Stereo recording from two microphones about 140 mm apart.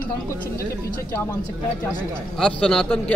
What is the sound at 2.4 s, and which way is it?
Speech, 5° left (ahead or behind).